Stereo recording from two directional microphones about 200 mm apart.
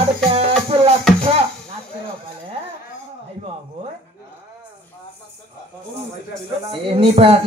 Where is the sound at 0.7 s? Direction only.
30° right (ahead or behind).